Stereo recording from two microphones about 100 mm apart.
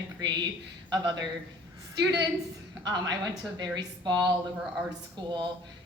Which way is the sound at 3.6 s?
45° right (ahead or behind).